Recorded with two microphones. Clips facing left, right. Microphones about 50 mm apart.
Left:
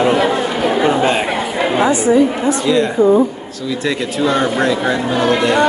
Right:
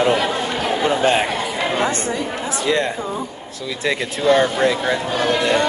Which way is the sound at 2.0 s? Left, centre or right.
Centre.